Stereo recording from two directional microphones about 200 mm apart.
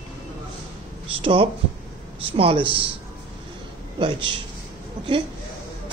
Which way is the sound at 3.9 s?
25° right (ahead or behind).